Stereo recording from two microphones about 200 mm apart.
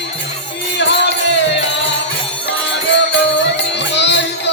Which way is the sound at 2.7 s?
60° left (ahead or behind).